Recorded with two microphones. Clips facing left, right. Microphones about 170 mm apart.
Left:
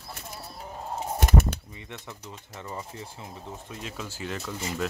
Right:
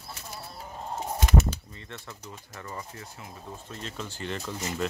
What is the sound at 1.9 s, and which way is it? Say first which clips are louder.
Speech: left 1 dB; 15° left (ahead or behind).